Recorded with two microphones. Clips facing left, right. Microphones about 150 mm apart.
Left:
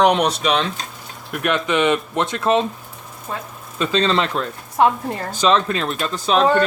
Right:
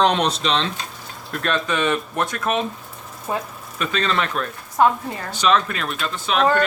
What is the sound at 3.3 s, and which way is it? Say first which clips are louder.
Speech: right 4 dB; 15° right (ahead or behind).